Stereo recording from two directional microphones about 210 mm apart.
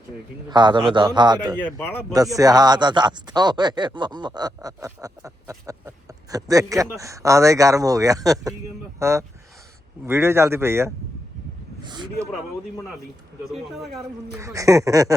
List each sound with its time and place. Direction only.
0.5 s a man's voice: 20° right (ahead or behind)
1.5 s speech: 5° left (ahead or behind)
2.1 s a man's voice: 15° right (ahead or behind)
13.4 s speech: centre (ahead or behind)
14.3 s speech: 15° right (ahead or behind)